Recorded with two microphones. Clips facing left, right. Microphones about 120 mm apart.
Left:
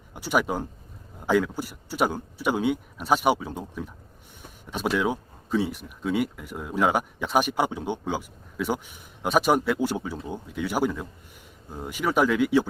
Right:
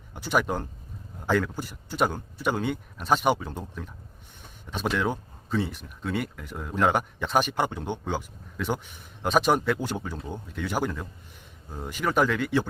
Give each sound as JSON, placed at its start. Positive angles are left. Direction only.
{"t": 0.1, "sound": "speech", "side_deg": 10}